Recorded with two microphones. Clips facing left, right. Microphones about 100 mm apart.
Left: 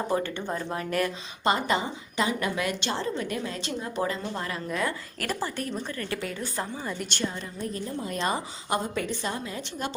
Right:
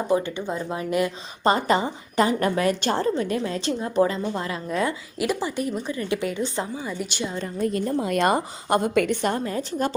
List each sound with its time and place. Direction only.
0.1 s a woman's voice: 15° right (ahead or behind)
1.5 s a woman's voice: 40° right (ahead or behind)
5.2 s a woman's voice: 10° right (ahead or behind)
6.7 s a woman's voice: 5° right (ahead or behind)
7.7 s a woman's voice: 80° right; by 9.9 s 45° right (ahead or behind)